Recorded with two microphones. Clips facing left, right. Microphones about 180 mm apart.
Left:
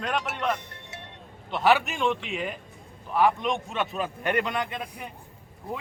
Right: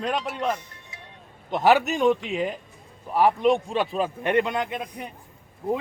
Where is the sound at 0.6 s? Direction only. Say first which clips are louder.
Left 3 dB; 65° left (ahead or behind).